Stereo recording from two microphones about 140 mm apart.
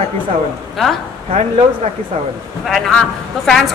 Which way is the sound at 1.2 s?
50° right (ahead or behind).